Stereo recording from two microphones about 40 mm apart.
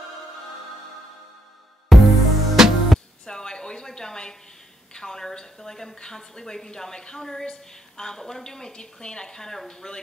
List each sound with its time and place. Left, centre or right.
1.9 s music: centre
3.3 s a sound: centre
4.9 s a woman's voice: centre